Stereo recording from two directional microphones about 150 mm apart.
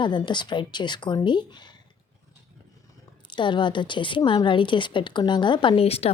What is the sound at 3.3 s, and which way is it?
A woman's voice, 30° left (ahead or behind).